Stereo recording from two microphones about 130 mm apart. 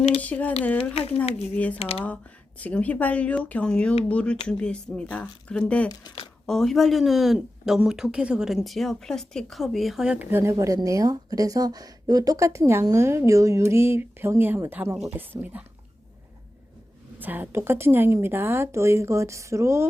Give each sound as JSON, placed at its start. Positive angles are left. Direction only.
{"t": 0.2, "sound": "speech", "side_deg": 10}
{"t": 0.9, "sound": "speech", "side_deg": 50}
{"t": 1.5, "sound": "speech", "side_deg": 10}
{"t": 1.8, "sound": "speech", "side_deg": 45}
{"t": 2.6, "sound": "speech", "side_deg": 10}
{"t": 5.9, "sound": "speech", "side_deg": 30}
{"t": 6.4, "sound": "speech", "side_deg": 5}
{"t": 17.2, "sound": "speech", "side_deg": -15}